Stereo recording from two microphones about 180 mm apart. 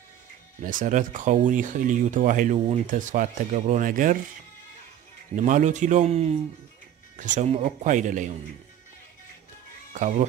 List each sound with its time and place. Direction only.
0.7 s speech: 45° right (ahead or behind)
5.3 s speech: 45° right (ahead or behind)
9.9 s speech: 45° right (ahead or behind)